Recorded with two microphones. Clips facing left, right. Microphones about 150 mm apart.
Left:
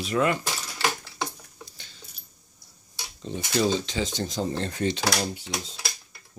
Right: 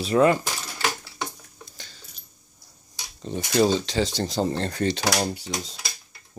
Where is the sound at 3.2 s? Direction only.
45° right (ahead or behind).